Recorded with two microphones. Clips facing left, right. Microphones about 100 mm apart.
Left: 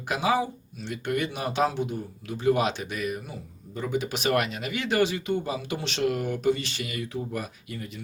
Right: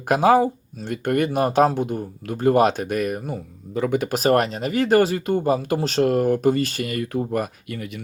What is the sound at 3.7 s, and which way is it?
Speech, 65° right (ahead or behind).